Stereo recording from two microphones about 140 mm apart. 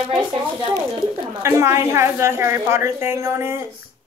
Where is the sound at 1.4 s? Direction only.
20° right (ahead or behind).